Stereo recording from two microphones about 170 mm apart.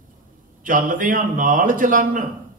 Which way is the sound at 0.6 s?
50° right (ahead or behind).